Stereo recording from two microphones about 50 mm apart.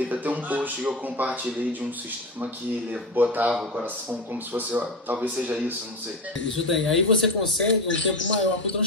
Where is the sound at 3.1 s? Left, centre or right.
Right.